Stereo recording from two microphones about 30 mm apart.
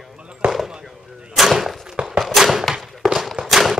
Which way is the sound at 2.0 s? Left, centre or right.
Right.